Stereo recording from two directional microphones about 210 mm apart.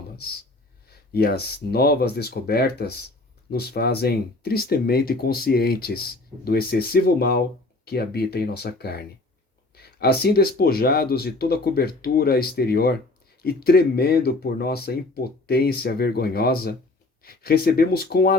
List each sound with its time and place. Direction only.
0.9 s speech: 50° left (ahead or behind)